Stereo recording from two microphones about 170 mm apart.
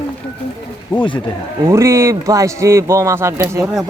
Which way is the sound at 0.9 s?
30° left (ahead or behind).